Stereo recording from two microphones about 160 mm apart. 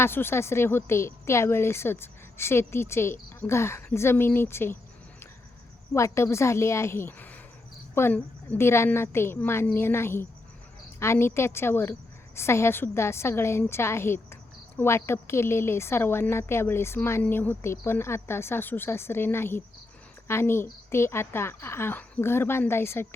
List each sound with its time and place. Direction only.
0.0 s a woman's voice: 15° left (ahead or behind)
5.9 s a woman's voice: 15° left (ahead or behind)